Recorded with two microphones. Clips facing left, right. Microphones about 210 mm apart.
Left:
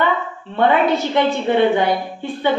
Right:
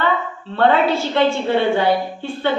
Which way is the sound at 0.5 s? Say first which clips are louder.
Even; 20° left (ahead or behind).